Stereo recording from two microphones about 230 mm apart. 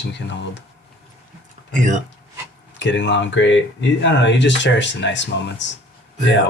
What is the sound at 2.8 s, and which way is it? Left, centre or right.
Speech, left.